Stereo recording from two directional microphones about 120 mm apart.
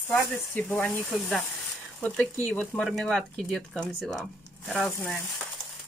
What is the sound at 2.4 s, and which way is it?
Speech, 10° left (ahead or behind).